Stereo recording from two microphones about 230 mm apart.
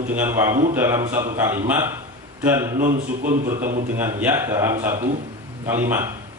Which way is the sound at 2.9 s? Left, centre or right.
Right.